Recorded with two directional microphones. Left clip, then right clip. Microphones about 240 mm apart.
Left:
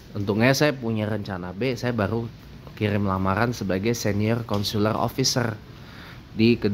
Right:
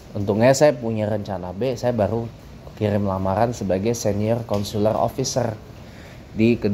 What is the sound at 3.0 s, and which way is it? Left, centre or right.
Speech, left.